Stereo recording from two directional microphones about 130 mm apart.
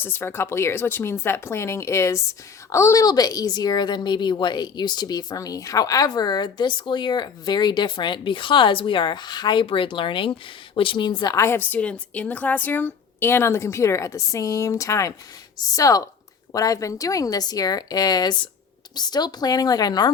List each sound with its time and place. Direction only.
0.0 s a woman's voice: 15° left (ahead or behind)